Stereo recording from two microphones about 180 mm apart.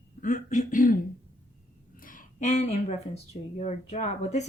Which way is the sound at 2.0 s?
50° left (ahead or behind).